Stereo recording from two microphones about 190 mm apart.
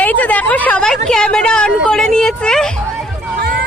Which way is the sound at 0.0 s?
10° left (ahead or behind).